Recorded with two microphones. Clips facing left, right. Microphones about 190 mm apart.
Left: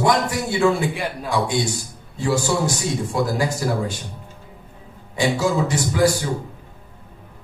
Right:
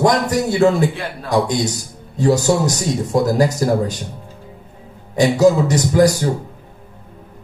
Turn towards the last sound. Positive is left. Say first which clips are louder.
# right 5 dB
turn(degrees=-40)  # may be behind; listen again after turning